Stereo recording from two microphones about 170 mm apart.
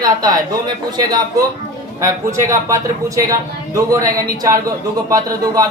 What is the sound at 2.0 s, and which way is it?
Speech, 20° right (ahead or behind).